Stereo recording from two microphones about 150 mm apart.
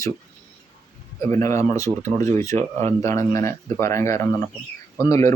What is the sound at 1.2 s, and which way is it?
Speech, 20° left (ahead or behind).